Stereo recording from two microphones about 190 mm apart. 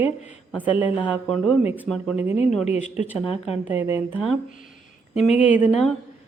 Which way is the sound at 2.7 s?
40° left (ahead or behind).